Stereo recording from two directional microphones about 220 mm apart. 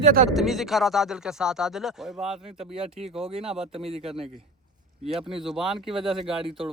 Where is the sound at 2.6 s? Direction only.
25° right (ahead or behind).